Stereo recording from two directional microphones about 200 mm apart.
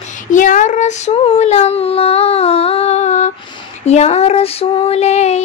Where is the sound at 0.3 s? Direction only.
40° left (ahead or behind).